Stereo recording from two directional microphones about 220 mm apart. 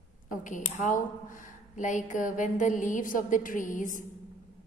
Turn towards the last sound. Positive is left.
turn(degrees=35)  # may be behind; listen again after turning